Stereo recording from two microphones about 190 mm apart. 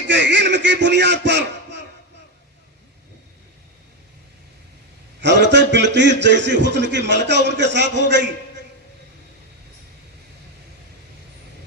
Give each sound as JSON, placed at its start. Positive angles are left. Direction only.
{"t": 0.1, "sound": "a man's voice", "side_deg": -65}
{"t": 5.2, "sound": "a man's voice", "side_deg": -65}